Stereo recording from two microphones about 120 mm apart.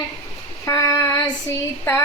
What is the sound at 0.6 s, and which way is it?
Child singing, 25° left (ahead or behind).